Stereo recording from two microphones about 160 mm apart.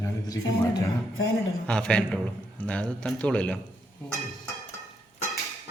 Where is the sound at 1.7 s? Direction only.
5° left (ahead or behind).